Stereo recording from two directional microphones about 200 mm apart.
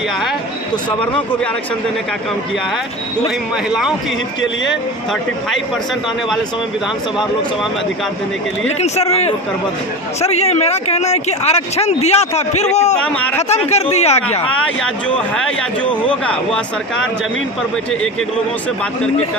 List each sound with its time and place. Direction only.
8.6 s speech: 30° left (ahead or behind)
13.1 s speech: 5° left (ahead or behind)
13.5 s speech: 35° left (ahead or behind)
14.8 s a man's voice: 5° left (ahead or behind)